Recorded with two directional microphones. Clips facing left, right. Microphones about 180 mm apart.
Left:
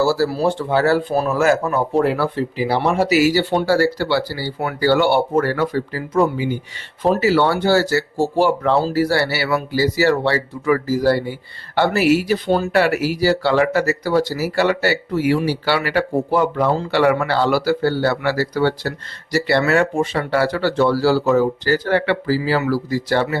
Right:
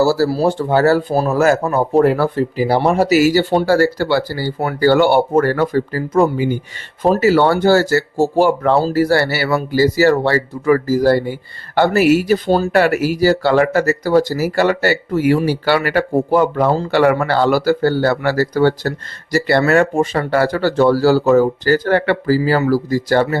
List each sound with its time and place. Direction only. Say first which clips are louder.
0.0 s speech: right 3 dB; 40° right (ahead or behind)